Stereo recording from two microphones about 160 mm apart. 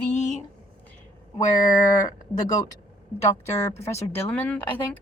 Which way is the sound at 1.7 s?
60° left (ahead or behind).